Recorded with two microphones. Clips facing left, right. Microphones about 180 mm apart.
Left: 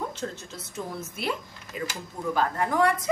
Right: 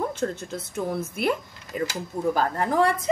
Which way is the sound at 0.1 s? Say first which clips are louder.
Right 7 dB; 50° right (ahead or behind).